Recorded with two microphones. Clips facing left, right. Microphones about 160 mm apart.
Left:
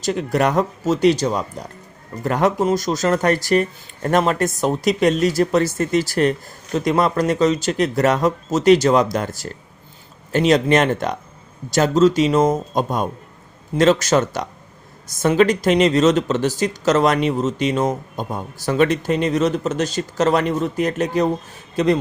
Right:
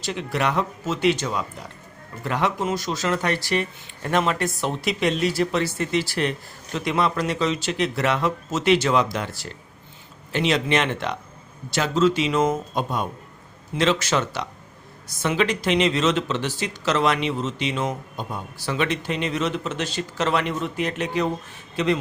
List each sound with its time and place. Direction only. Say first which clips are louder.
0.0 s speech: left 6 dB; 45° left (ahead or behind)